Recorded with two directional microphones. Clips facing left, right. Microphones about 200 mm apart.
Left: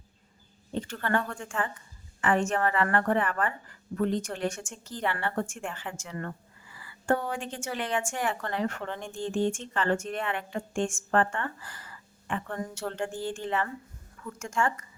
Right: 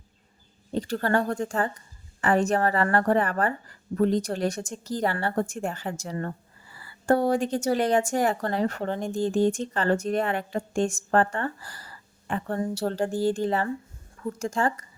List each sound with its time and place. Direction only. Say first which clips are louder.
0.7 s a woman's voice: right 5 dB; 35° right (ahead or behind)